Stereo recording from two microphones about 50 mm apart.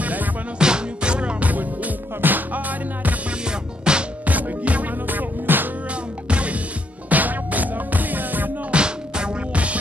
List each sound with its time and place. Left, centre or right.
0.0 s music: right
0.6 s music: centre
2.2 s music: right
3.9 s music: centre
4.3 s music: right
6.2 s music: right
8.7 s music: centre